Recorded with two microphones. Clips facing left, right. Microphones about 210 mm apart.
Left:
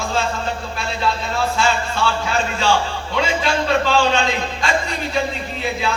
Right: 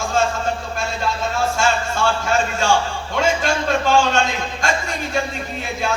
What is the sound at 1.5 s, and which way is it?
A man's voice, 45° right (ahead or behind).